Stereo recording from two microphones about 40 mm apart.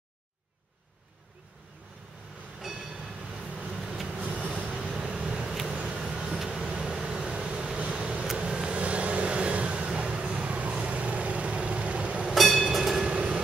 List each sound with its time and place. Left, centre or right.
2.6 s train: centre
3.4 s vehicle: right
8.7 s vehicle: right
12.4 s train: centre
13.1 s train: right